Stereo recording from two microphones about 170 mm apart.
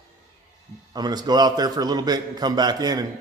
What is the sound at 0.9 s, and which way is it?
A man's voice, 25° right (ahead or behind).